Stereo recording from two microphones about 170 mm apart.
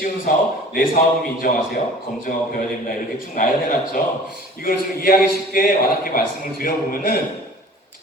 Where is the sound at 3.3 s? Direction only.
55° left (ahead or behind).